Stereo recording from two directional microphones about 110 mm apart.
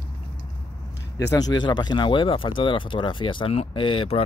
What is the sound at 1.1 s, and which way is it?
Speech, 35° left (ahead or behind).